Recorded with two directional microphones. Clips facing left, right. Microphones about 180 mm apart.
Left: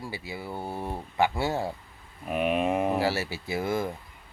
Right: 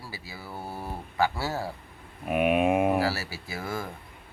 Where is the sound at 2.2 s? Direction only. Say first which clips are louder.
Right 3 dB; 5° right (ahead or behind).